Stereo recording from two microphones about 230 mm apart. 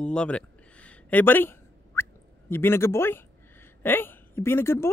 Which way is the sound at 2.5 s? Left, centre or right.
Centre.